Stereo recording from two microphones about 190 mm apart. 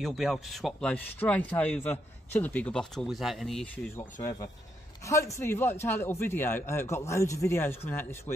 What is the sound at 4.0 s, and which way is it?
A man's voice, 15° left (ahead or behind).